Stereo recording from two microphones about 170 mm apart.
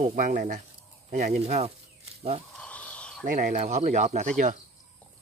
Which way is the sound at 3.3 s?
45° right (ahead or behind).